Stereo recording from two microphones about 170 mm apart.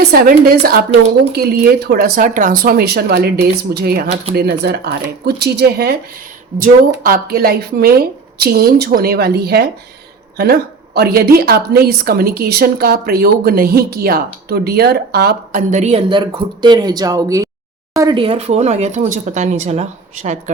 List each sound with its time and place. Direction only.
0.0 s a woman's voice: 65° right (ahead or behind)
15.5 s speech: 45° right (ahead or behind)